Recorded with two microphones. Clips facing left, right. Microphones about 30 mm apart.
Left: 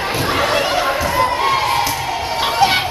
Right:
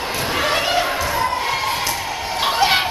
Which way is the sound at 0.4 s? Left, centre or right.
Centre.